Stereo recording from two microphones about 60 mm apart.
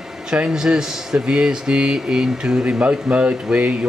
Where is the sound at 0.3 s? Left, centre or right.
Centre.